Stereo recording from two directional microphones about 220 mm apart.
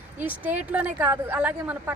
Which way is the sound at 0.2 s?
5° right (ahead or behind).